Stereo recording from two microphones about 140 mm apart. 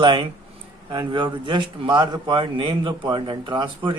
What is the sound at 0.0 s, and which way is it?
A man's voice, 35° right (ahead or behind).